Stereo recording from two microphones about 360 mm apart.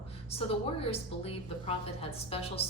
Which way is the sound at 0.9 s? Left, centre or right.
Centre.